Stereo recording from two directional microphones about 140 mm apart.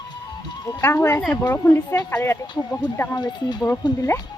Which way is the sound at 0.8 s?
15° left (ahead or behind).